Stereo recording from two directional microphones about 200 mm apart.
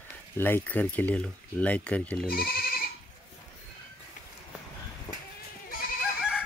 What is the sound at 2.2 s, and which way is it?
Speech, 50° left (ahead or behind).